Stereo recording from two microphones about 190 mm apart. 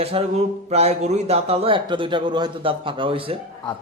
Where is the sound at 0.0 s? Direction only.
30° right (ahead or behind).